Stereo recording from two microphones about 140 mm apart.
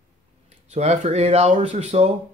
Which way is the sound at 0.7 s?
55° right (ahead or behind).